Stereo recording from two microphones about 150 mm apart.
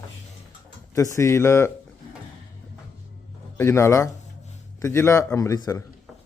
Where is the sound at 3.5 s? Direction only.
20° left (ahead or behind).